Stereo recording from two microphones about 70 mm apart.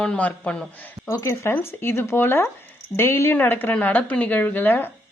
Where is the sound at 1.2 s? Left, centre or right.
Left.